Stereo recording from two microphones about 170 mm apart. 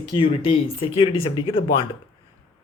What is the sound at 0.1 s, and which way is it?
Speech, 30° left (ahead or behind).